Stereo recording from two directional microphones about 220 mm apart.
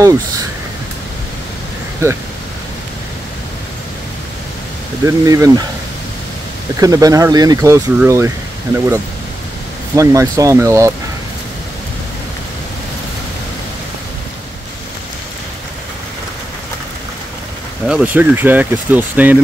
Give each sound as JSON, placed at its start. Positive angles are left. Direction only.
{"t": 5.0, "sound": "speech", "side_deg": -15}
{"t": 6.8, "sound": "speech", "side_deg": -15}
{"t": 17.8, "sound": "speech", "side_deg": -5}